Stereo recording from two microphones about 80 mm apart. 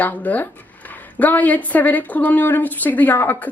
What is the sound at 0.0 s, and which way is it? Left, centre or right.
A woman's voice, left.